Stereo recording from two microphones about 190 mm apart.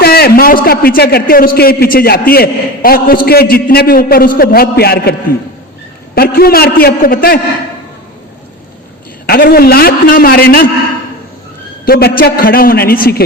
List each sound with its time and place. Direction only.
0.0 s a man's voice: 55° left (ahead or behind)
6.1 s a man's voice: 50° left (ahead or behind)
9.2 s a man's voice: 50° left (ahead or behind)
11.9 s a man's voice: 55° left (ahead or behind)